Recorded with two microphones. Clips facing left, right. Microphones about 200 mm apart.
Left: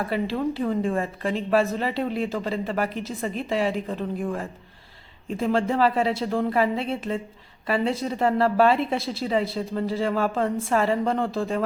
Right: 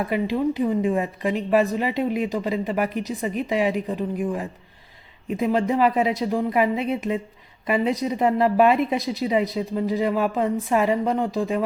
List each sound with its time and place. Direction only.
0.1 s a woman's voice: 15° right (ahead or behind)
5.3 s a woman's voice: 15° right (ahead or behind)